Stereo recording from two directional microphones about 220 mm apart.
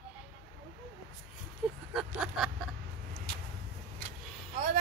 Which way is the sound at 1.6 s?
5° right (ahead or behind).